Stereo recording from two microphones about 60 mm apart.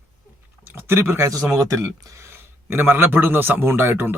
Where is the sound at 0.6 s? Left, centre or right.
Right.